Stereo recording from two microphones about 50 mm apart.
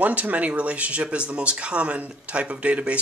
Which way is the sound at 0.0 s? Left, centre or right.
Right.